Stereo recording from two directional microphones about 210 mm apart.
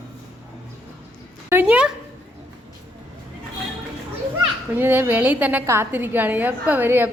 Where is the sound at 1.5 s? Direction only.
5° right (ahead or behind).